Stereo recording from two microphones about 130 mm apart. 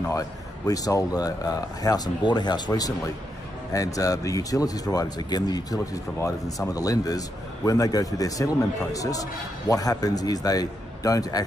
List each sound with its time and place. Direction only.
0.0 s a man's voice: 25° left (ahead or behind)